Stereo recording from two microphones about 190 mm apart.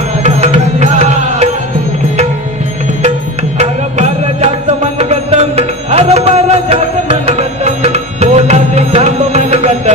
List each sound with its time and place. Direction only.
0.2 s music: 35° right (ahead or behind)
3.5 s music: 35° right (ahead or behind)